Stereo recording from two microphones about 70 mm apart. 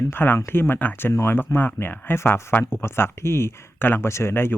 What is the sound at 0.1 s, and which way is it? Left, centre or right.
Speech, left.